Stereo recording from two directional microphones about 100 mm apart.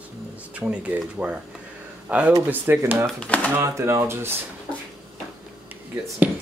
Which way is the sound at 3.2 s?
15° left (ahead or behind).